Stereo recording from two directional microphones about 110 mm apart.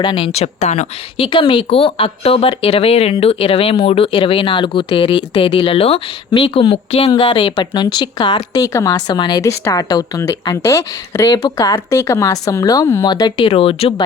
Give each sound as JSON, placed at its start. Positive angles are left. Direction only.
{"t": 0.0, "sound": "speech", "side_deg": 50}
{"t": 1.1, "sound": "speech", "side_deg": 50}
{"t": 5.5, "sound": "speech", "side_deg": 60}
{"t": 13.3, "sound": "speech", "side_deg": 55}